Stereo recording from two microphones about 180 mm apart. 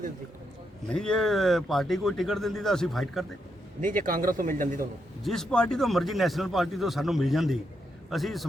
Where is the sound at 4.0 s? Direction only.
50° right (ahead or behind).